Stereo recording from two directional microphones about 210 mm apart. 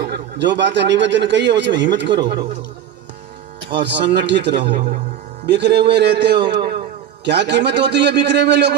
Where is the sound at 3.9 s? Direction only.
55° right (ahead or behind).